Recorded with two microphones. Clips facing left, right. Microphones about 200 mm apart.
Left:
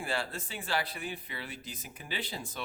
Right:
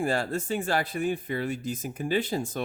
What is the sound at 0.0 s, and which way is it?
Speech, 45° right (ahead or behind).